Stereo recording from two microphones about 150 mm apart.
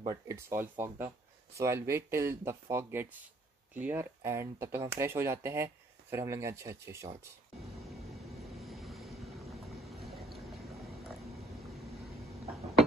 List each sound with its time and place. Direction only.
0.0 s speech: 20° right (ahead or behind)
8.5 s vehicle: centre (ahead or behind)
10.0 s a sound: centre (ahead or behind)